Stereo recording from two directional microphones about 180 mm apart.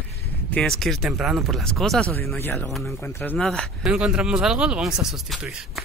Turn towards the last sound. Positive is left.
turn(degrees=0)  # may be behind; listen again after turning